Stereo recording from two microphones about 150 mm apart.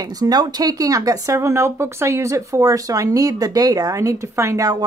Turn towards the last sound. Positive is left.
turn(degrees=-25)  # may be behind; listen again after turning